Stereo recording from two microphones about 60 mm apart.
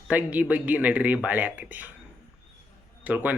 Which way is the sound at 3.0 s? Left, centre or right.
Right.